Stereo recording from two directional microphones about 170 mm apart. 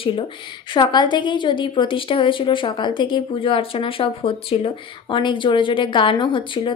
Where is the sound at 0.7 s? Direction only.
25° left (ahead or behind).